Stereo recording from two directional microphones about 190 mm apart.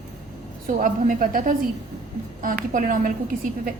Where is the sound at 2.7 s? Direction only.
45° right (ahead or behind).